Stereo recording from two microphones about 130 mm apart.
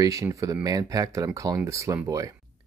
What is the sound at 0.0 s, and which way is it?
Speech, 25° right (ahead or behind).